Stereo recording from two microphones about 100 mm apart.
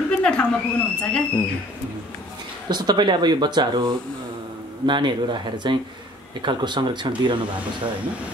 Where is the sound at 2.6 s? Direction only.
45° right (ahead or behind).